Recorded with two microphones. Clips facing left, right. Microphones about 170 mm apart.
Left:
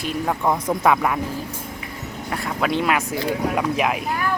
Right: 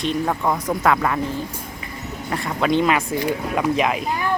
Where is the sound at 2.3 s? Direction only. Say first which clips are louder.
Right 3 dB; centre (ahead or behind).